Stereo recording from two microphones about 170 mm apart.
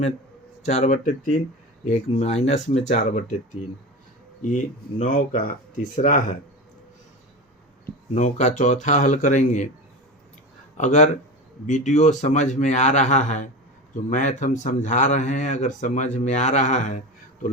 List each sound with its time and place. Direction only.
0.6 s speech: 45° left (ahead or behind)
8.1 s speech: 45° left (ahead or behind)
10.8 s speech: 45° left (ahead or behind)